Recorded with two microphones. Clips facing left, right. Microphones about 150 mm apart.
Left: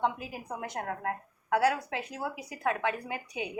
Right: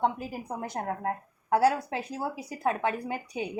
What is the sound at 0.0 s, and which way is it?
A woman's voice, 40° right (ahead or behind).